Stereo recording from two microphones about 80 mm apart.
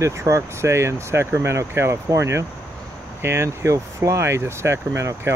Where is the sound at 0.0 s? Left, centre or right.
Right.